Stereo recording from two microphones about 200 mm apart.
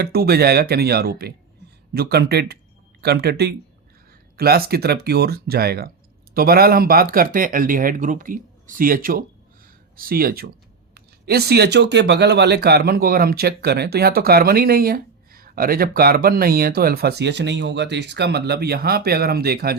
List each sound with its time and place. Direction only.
0.0 s speech: 50° right (ahead or behind)